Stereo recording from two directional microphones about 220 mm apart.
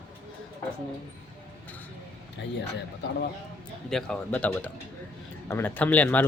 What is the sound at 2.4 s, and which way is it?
Speech, 50° left (ahead or behind).